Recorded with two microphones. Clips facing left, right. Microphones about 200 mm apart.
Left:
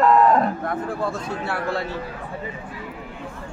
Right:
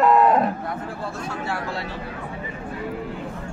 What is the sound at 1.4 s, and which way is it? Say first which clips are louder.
Speech: left 5 dB; 55° left (ahead or behind).